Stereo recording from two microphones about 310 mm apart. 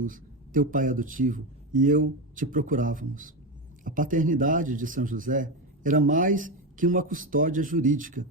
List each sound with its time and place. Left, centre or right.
0.0 s a man's voice: right